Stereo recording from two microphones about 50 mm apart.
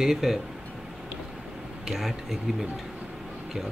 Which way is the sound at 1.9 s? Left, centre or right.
Centre.